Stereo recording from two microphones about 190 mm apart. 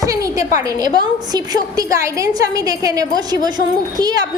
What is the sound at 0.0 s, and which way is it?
A woman's voice, 15° right (ahead or behind).